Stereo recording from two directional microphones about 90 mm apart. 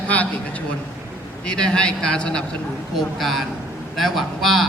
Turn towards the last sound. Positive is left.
turn(degrees=0)  # may be behind; listen again after turning